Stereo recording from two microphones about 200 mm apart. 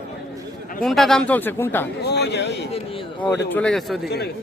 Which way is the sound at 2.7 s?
25° left (ahead or behind).